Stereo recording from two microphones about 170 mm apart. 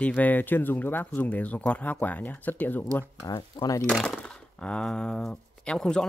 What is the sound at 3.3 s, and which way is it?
Speech, 25° left (ahead or behind).